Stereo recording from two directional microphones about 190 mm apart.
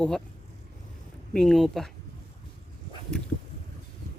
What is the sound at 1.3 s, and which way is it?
Speech, 5° left (ahead or behind).